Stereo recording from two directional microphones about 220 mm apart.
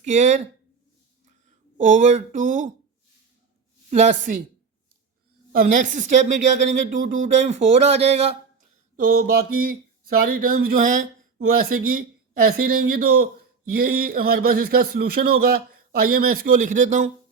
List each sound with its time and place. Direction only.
0.0 s speech: 30° right (ahead or behind)
1.8 s speech: 35° right (ahead or behind)
3.8 s speech: 30° right (ahead or behind)
5.5 s speech: 35° right (ahead or behind)
9.0 s speech: 40° right (ahead or behind)